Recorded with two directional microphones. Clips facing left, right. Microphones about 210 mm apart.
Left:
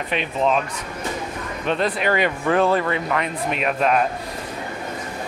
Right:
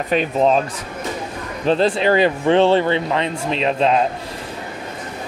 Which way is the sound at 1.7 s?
30° right (ahead or behind).